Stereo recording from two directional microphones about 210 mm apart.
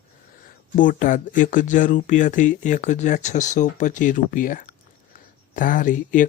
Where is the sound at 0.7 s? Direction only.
40° left (ahead or behind).